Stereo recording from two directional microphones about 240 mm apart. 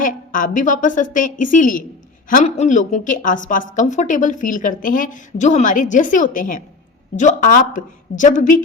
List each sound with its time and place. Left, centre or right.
0.0 s a woman's voice: left